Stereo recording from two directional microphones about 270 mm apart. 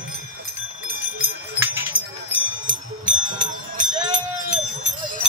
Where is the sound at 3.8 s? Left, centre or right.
Right.